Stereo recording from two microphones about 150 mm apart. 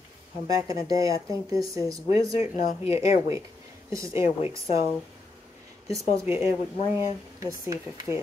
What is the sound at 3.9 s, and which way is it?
Speech, 20° right (ahead or behind).